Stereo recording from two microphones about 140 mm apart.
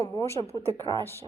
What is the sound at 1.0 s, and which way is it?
Speech, 15° left (ahead or behind).